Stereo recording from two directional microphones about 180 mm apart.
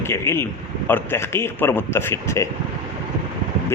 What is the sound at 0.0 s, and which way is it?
A man's voice, 15° left (ahead or behind).